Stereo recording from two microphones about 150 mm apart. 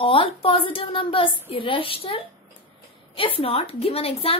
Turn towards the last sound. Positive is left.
turn(degrees=40)  # may be behind; listen again after turning